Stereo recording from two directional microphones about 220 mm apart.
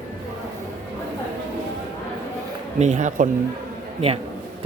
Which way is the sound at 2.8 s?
35° right (ahead or behind).